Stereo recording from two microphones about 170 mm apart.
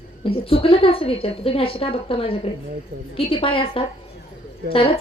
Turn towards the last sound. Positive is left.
turn(degrees=30)  # may be behind; listen again after turning